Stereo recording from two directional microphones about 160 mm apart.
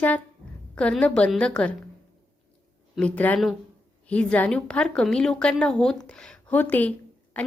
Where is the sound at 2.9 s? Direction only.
10° left (ahead or behind).